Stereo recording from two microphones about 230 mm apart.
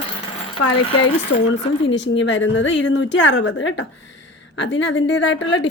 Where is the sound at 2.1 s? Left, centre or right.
Left.